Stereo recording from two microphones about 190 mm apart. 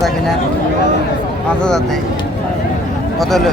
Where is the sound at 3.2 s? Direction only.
Centre (ahead or behind).